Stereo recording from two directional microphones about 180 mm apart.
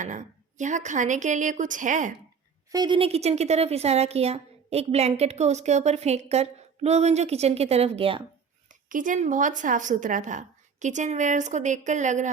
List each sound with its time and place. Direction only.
0.0 s a woman's voice: 45° right (ahead or behind)
2.7 s a woman's voice: 25° right (ahead or behind)
8.9 s a woman's voice: 45° right (ahead or behind)